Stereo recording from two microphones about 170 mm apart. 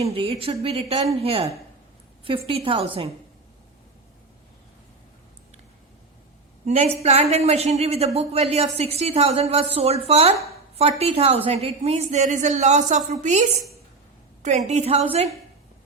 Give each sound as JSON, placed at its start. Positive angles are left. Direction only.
{"t": 0.0, "sound": "a woman's voice", "side_deg": -35}
{"t": 6.7, "sound": "a woman's voice", "side_deg": -40}
{"t": 14.7, "sound": "a woman's voice", "side_deg": -40}